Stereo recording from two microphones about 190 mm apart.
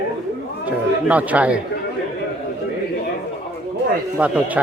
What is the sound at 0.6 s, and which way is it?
Speech, 5° right (ahead or behind).